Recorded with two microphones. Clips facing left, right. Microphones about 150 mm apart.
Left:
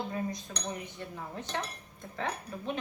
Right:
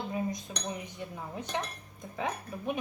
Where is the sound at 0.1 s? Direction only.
15° right (ahead or behind).